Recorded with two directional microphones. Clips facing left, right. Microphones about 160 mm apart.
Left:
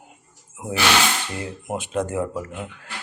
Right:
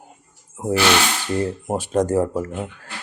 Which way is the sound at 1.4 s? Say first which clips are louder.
Right 7 dB; 35° right (ahead or behind).